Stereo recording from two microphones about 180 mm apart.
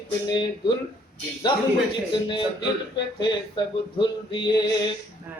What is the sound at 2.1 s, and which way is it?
Speech, 25° left (ahead or behind).